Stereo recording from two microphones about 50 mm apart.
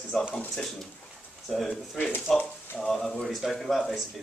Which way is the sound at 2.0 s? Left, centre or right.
Left.